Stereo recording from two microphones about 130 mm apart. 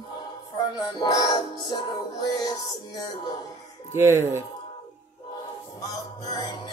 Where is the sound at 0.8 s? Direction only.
30° left (ahead or behind).